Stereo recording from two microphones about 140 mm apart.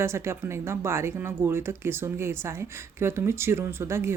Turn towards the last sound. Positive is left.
turn(degrees=-20)  # may be behind; listen again after turning